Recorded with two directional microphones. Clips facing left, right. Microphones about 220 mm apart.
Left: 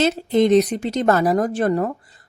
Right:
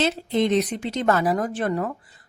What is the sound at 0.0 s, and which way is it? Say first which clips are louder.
Speech: left 5 dB; 45° left (ahead or behind).